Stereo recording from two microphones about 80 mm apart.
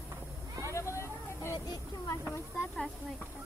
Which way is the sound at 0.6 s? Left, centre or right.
Left.